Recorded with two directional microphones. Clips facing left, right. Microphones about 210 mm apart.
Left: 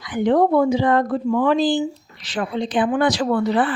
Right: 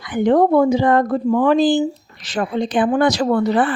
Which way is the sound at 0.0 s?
50° right (ahead or behind).